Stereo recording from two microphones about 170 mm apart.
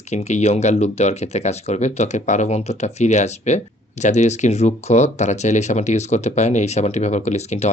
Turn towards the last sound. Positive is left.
turn(degrees=40)  # may be behind; listen again after turning